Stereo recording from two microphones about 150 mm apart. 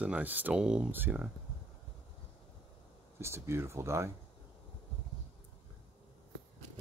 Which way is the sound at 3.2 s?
15° right (ahead or behind).